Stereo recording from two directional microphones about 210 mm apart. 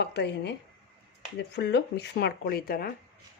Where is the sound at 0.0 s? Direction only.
50° left (ahead or behind).